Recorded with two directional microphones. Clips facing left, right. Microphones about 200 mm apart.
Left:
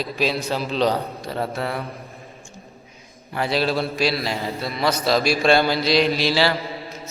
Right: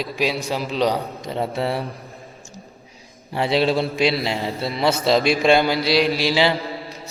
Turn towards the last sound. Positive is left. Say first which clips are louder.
# right 1 dB
turn(degrees=-15)  # may be behind; listen again after turning